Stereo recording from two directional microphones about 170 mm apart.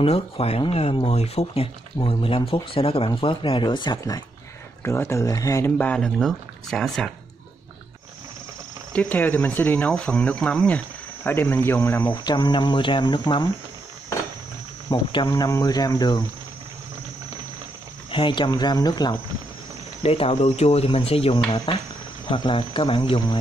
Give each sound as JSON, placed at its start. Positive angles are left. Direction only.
{"t": 0.0, "sound": "speech", "side_deg": 35}
{"t": 8.9, "sound": "speech", "side_deg": 10}
{"t": 12.3, "sound": "speech", "side_deg": 25}
{"t": 14.9, "sound": "speech", "side_deg": 25}
{"t": 18.1, "sound": "speech", "side_deg": 30}
{"t": 20.0, "sound": "speech", "side_deg": 35}